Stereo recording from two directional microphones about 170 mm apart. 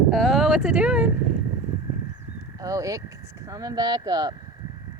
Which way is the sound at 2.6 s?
20° right (ahead or behind).